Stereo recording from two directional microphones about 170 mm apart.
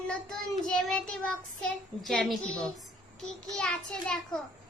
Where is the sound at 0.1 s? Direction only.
5° left (ahead or behind).